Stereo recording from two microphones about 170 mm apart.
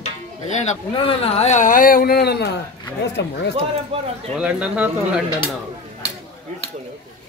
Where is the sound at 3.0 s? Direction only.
90° left.